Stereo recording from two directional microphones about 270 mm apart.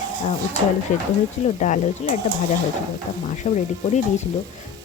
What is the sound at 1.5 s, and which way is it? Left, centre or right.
Speech, left.